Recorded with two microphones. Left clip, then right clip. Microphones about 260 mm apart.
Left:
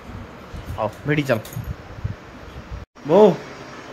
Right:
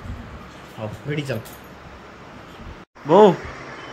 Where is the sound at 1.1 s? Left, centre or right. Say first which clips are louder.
Left 7 dB; centre.